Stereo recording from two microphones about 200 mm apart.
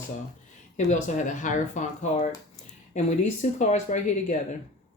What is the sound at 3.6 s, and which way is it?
Speech, 35° left (ahead or behind).